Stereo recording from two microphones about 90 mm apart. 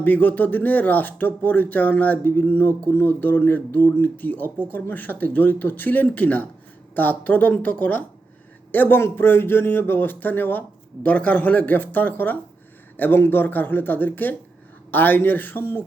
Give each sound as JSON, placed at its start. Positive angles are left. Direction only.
{"t": 0.0, "sound": "speech", "side_deg": 20}